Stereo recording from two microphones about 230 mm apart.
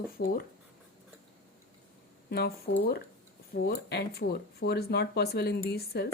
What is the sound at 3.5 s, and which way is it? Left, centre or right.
Speech, left.